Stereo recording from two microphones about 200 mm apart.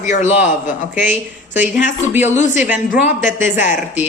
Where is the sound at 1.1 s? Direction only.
10° right (ahead or behind).